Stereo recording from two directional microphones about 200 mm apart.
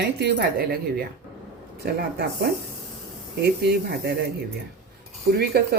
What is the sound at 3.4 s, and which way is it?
Speech, 55° right (ahead or behind).